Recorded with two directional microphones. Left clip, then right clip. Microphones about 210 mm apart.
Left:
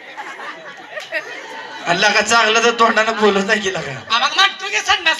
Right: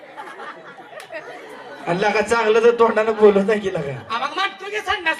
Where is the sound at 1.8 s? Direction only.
55° right (ahead or behind).